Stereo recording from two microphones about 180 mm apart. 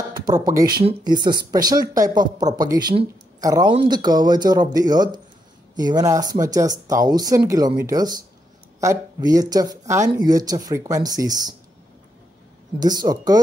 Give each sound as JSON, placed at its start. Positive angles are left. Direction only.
{"t": 0.5, "sound": "speech", "side_deg": -20}
{"t": 12.7, "sound": "speech", "side_deg": -20}